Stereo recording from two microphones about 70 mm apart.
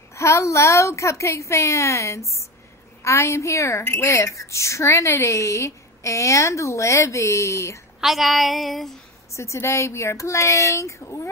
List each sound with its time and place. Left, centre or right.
0.1 s a woman's voice: left
8.0 s a sound: centre
9.3 s a woman's voice: left